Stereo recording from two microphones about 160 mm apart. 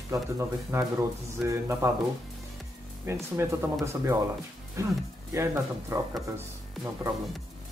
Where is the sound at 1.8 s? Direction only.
15° right (ahead or behind).